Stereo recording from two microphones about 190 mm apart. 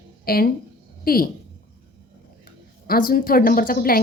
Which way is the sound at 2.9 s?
50° left (ahead or behind).